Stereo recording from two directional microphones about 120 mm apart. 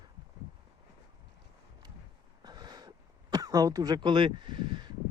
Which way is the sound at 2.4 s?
35° right (ahead or behind).